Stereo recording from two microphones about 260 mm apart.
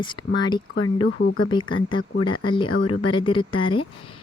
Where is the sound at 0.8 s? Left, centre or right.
Left.